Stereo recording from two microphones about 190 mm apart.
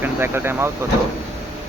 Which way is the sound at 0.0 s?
10° right (ahead or behind).